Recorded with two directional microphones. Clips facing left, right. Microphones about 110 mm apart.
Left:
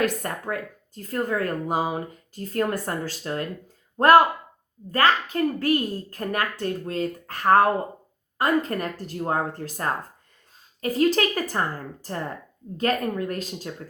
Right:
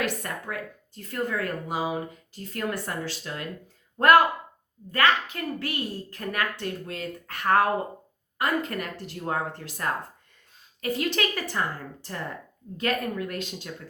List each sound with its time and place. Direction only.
0.0 s speech: 40° left (ahead or behind)